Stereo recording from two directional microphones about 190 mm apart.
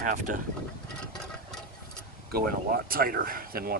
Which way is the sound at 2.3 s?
50° right (ahead or behind).